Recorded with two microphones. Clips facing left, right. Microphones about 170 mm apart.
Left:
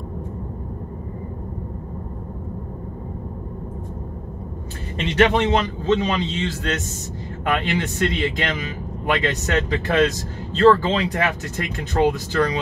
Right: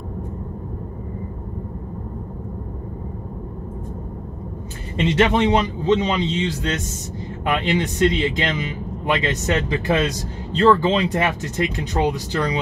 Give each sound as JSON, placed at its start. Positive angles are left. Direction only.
{"t": 4.9, "sound": "a man's voice", "side_deg": -20}